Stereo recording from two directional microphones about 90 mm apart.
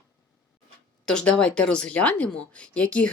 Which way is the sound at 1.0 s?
10° left (ahead or behind).